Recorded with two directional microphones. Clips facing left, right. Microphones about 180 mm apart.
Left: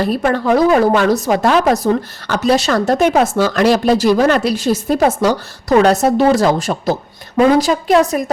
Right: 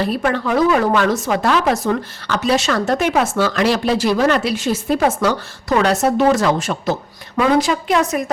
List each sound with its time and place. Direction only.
0.0 s speech: 40° left (ahead or behind)